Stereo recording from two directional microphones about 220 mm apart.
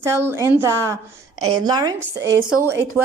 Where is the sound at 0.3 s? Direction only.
10° right (ahead or behind).